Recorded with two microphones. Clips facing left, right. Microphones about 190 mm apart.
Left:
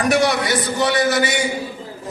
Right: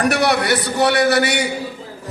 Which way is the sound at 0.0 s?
65° right (ahead or behind).